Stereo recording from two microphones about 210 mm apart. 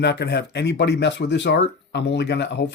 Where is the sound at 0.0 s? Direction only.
55° left (ahead or behind).